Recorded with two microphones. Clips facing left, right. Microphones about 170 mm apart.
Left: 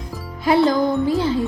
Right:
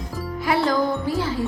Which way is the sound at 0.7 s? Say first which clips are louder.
Left 4 dB; 20° left (ahead or behind).